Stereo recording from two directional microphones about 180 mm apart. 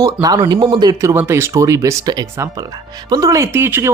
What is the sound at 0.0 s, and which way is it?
Speech, 20° right (ahead or behind).